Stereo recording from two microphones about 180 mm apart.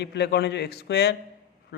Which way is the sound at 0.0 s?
70° left (ahead or behind).